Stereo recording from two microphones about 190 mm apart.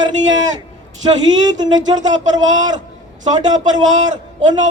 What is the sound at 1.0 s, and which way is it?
Speech, 25° right (ahead or behind).